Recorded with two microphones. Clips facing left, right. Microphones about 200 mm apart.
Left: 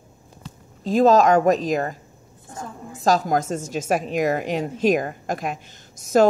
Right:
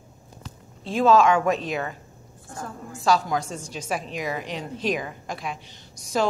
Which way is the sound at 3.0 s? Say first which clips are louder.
Left 3 dB; 40° left (ahead or behind).